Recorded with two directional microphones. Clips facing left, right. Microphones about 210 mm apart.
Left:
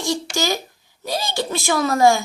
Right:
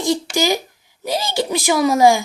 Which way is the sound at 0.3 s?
15° right (ahead or behind).